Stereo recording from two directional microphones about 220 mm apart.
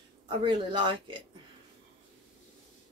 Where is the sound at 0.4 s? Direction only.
20° right (ahead or behind).